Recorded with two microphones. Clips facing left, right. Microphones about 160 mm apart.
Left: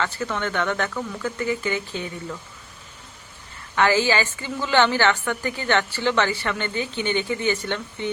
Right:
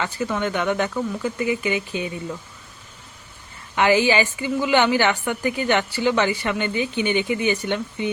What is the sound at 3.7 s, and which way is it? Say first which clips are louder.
Speech: right 2 dB; 15° right (ahead or behind).